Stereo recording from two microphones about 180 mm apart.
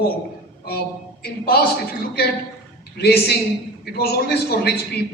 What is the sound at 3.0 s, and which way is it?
A man's voice, 65° left (ahead or behind).